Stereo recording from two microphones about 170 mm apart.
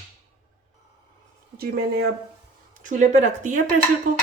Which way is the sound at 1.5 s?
65° right (ahead or behind).